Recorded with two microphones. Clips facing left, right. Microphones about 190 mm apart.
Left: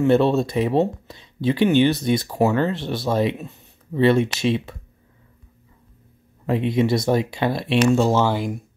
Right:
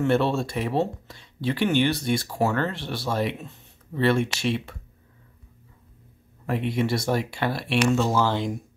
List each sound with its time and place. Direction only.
0.0 s speech: 15° left (ahead or behind)
6.4 s speech: 20° left (ahead or behind)
7.9 s speech: 30° left (ahead or behind)
8.3 s speech: 5° left (ahead or behind)